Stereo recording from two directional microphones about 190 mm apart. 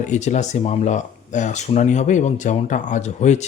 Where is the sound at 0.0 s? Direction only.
40° left (ahead or behind).